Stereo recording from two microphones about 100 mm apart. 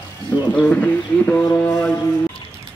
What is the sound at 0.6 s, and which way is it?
Music, 15° left (ahead or behind).